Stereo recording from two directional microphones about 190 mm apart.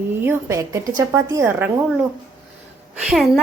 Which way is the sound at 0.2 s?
15° right (ahead or behind).